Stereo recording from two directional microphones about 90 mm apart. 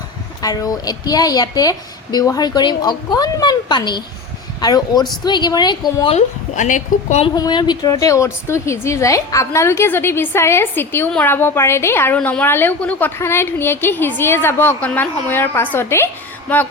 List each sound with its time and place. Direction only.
0.4 s a woman's voice: 45° left (ahead or behind)
3.7 s a woman's voice: 55° left (ahead or behind)
7.3 s a woman's voice: 50° left (ahead or behind); by 13.1 s 15° left (ahead or behind)
13.1 s a woman's voice: 30° left (ahead or behind)